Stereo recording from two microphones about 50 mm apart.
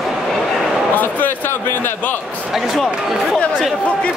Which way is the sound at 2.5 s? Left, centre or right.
Centre.